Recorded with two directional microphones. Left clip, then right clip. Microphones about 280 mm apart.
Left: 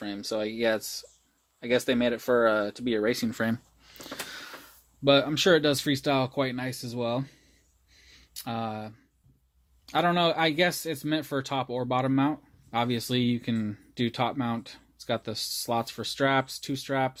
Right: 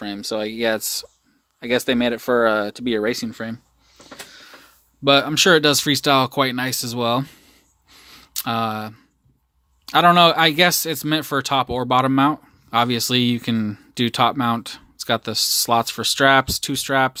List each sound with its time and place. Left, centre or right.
0.0 s speech: right
3.2 s speech: centre
3.9 s a sound: left
5.0 s speech: centre
7.9 s a sound: right
9.8 s speech: centre